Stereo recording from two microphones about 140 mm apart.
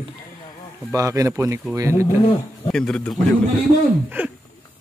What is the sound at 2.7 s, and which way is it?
Speech, 5° left (ahead or behind).